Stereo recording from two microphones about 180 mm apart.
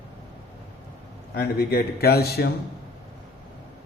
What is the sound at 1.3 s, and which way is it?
A man's voice, 60° left (ahead or behind).